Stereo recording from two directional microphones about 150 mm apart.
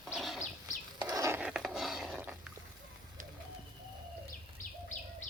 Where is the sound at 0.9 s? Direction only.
25° right (ahead or behind).